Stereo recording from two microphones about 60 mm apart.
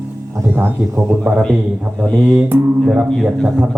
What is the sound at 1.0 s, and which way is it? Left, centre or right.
Speech, centre.